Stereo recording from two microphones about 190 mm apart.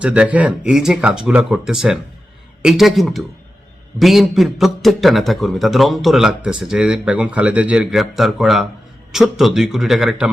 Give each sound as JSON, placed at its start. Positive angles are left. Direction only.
{"t": 0.0, "sound": "a man's voice", "side_deg": -5}